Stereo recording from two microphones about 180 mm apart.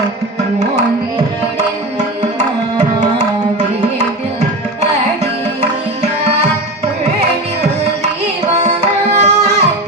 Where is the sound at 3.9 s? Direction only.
40° right (ahead or behind).